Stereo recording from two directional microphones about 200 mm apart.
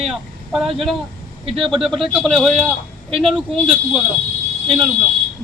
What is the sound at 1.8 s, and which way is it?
A man's voice, centre (ahead or behind).